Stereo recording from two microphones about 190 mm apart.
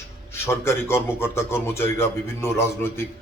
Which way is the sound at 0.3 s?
15° left (ahead or behind).